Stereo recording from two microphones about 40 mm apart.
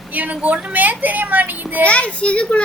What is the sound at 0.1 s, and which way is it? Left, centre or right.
A woman's voice, right.